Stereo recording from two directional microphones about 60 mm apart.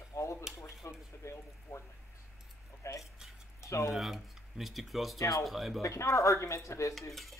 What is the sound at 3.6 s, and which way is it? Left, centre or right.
Speech, left.